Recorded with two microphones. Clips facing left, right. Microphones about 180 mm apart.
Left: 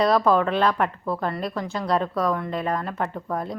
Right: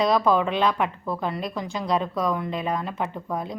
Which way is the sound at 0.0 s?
Centre (ahead or behind).